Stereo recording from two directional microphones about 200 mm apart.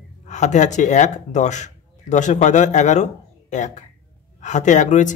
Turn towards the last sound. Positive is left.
turn(degrees=40)  # may be behind; listen again after turning